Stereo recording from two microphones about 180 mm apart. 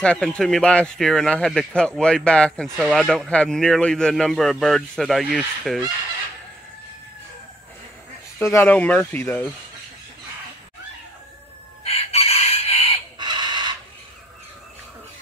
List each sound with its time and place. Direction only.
0.0 s speech: 5° left (ahead or behind)
8.4 s speech: 15° left (ahead or behind)
11.8 s chicken: 35° left (ahead or behind)
13.2 s chicken: 25° right (ahead or behind)